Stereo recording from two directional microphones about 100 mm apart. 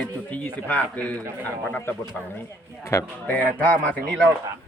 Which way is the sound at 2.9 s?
30° left (ahead or behind).